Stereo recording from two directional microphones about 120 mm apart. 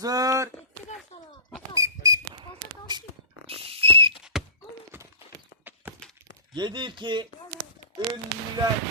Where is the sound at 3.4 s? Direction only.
50° right (ahead or behind).